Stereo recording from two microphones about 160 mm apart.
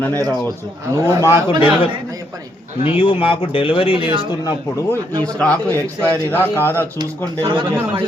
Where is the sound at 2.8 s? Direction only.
35° left (ahead or behind).